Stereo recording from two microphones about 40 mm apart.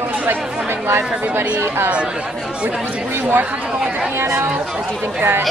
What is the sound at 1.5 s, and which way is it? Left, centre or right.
Speech, right.